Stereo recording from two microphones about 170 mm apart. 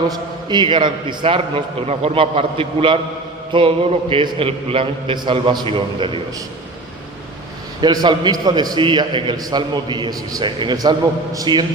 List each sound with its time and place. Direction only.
0.1 s a man's voice: 25° right (ahead or behind)
7.8 s a man's voice: 25° right (ahead or behind)